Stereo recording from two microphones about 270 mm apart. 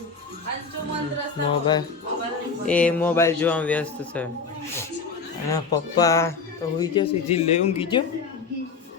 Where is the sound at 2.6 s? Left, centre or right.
Centre.